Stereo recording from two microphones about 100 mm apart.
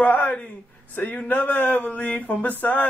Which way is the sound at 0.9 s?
15° left (ahead or behind).